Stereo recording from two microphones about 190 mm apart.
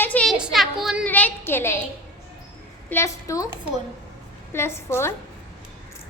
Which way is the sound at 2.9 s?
15° left (ahead or behind).